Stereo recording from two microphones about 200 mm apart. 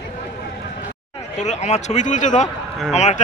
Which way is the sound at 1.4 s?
35° left (ahead or behind).